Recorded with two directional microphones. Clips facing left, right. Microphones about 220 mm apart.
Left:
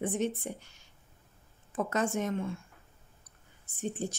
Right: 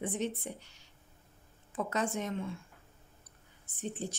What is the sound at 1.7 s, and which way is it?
Speech, 50° left (ahead or behind).